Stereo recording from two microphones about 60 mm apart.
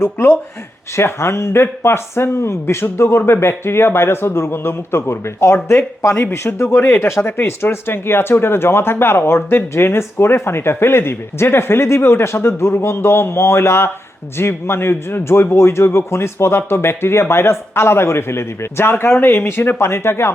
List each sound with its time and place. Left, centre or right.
0.0 s speech: left